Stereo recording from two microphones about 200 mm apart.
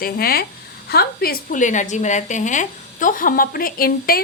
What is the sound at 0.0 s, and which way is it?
A woman's voice, 50° left (ahead or behind).